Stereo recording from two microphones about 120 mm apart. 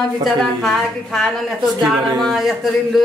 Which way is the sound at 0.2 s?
Centre (ahead or behind).